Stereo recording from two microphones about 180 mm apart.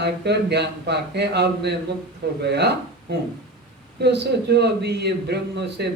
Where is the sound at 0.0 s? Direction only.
70° right (ahead or behind).